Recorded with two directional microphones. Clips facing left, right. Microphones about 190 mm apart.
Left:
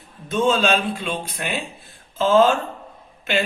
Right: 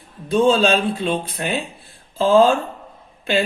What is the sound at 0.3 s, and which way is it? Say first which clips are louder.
Speech: right 4 dB; 35° right (ahead or behind).